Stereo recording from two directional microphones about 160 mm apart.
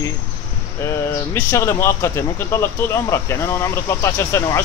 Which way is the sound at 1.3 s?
15° left (ahead or behind).